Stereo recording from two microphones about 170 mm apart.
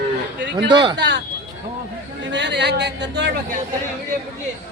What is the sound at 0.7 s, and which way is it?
Speech, 25° right (ahead or behind).